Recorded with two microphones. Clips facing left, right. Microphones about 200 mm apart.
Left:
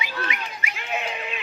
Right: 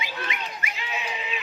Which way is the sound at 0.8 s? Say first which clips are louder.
Left 5 dB; 55° left (ahead or behind).